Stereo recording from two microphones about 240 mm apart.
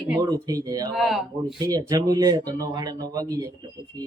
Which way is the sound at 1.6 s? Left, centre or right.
Centre.